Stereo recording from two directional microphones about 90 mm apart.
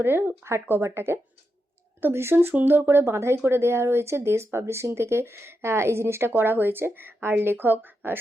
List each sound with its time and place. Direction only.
0.0 s speech: 25° right (ahead or behind)